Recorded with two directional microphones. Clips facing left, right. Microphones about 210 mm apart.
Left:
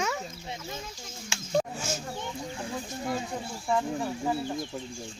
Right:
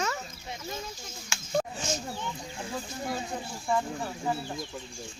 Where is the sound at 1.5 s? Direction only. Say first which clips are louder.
Left 1 dB; 10° left (ahead or behind).